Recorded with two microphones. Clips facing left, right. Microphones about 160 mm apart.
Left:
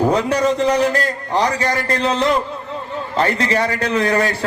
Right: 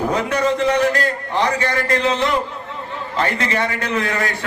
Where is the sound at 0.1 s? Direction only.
35° left (ahead or behind).